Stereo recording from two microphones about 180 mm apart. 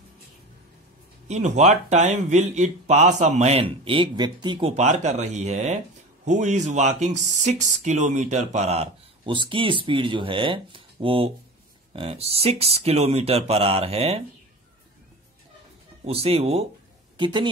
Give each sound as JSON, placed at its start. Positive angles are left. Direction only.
{"t": 1.2, "sound": "speech", "side_deg": -40}
{"t": 16.1, "sound": "speech", "side_deg": -35}